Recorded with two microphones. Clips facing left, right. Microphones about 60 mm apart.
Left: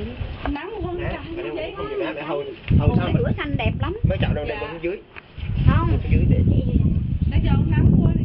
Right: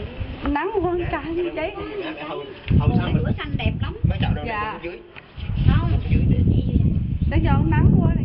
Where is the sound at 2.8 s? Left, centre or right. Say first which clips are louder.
Even; centre.